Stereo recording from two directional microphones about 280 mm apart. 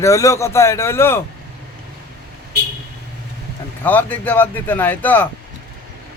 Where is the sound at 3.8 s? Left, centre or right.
Centre.